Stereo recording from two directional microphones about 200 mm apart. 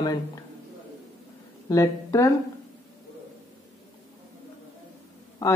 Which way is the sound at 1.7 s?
15° left (ahead or behind).